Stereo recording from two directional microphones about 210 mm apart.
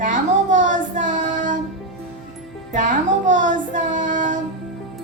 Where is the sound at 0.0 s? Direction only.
35° right (ahead or behind).